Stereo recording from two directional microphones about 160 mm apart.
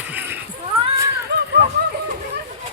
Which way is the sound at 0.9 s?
20° right (ahead or behind).